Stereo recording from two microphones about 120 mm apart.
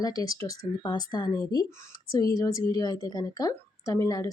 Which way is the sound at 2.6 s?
35° left (ahead or behind).